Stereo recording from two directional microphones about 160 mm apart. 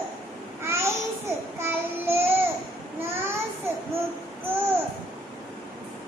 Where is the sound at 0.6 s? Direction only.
15° right (ahead or behind).